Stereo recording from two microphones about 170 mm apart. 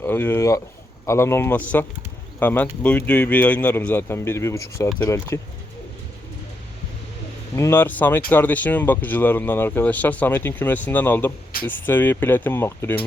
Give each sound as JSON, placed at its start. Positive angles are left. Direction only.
{"t": 0.0, "sound": "speech", "side_deg": 15}
{"t": 7.5, "sound": "speech", "side_deg": 15}